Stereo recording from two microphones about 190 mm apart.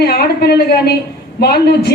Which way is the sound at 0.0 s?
55° left (ahead or behind).